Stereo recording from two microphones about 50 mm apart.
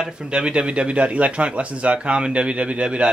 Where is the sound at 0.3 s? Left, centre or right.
Centre.